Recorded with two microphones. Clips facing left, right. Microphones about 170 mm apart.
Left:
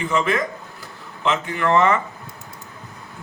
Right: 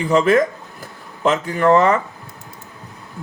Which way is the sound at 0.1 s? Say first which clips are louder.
Right 9 dB; 40° right (ahead or behind).